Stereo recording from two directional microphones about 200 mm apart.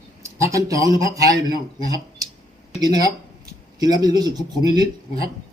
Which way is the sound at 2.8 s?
20° right (ahead or behind).